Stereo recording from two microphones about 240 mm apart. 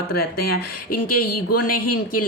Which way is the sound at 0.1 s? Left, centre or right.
Left.